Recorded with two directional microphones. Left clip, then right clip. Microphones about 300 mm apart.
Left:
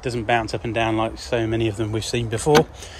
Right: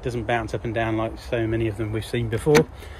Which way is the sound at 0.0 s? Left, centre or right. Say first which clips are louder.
Left 4 dB; centre.